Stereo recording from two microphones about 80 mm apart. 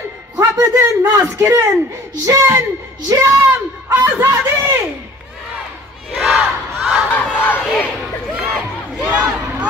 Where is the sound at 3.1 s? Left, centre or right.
Right.